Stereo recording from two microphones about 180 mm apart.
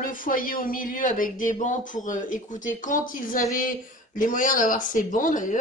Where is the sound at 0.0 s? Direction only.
50° left (ahead or behind).